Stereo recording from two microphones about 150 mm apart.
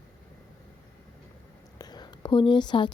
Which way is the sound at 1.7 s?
25° left (ahead or behind).